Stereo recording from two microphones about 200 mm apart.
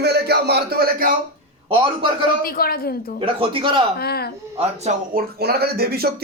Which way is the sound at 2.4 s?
50° left (ahead or behind).